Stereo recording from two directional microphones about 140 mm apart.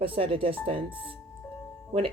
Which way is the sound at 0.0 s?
40° right (ahead or behind).